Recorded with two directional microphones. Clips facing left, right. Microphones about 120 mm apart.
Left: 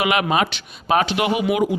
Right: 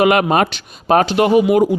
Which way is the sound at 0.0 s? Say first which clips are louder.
Right 6 dB; 45° right (ahead or behind).